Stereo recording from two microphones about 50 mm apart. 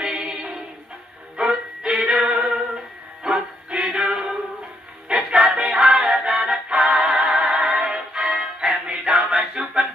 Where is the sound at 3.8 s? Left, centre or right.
Centre.